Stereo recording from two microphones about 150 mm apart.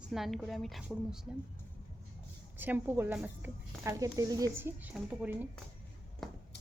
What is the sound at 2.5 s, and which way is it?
Speech, 10° right (ahead or behind).